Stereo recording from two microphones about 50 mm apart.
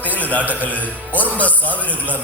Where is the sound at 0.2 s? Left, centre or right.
Left.